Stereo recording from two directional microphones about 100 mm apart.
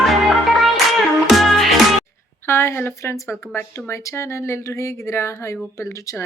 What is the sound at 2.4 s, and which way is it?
Speech, 25° left (ahead or behind).